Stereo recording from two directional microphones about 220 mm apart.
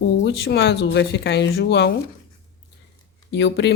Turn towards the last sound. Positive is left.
turn(degrees=50)  # may be behind; listen again after turning